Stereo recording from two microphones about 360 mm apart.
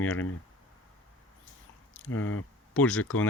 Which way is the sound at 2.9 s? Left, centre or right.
Left.